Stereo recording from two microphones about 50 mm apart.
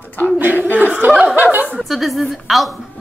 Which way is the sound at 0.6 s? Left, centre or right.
Right.